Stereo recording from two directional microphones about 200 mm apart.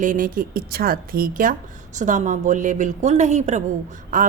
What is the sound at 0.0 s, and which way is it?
A woman's voice, 40° right (ahead or behind).